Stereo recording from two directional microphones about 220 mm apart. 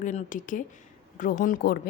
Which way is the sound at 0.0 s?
35° left (ahead or behind).